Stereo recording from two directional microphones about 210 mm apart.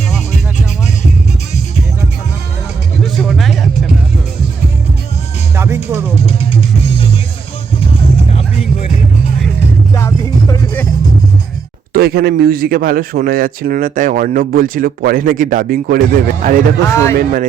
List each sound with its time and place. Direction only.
3.0 s music: centre (ahead or behind)
5.5 s music: 10° right (ahead or behind)
11.9 s speech: 45° right (ahead or behind)
16.8 s speech: 15° left (ahead or behind)
17.2 s speech: 40° right (ahead or behind)